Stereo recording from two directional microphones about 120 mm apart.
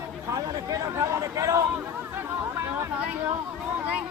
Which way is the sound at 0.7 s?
25° right (ahead or behind).